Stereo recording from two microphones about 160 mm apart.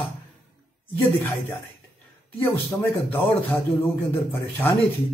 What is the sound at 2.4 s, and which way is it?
Speech, 15° left (ahead or behind).